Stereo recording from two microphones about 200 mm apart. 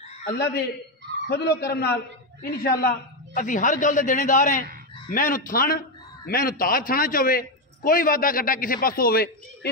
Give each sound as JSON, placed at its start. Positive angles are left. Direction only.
{"t": 0.2, "sound": "a man's voice", "side_deg": 55}